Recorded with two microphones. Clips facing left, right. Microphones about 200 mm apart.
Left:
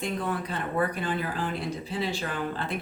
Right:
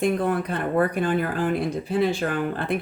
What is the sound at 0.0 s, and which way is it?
Speech, 55° right (ahead or behind).